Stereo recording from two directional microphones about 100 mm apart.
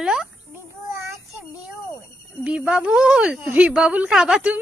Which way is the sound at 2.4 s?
10° right (ahead or behind).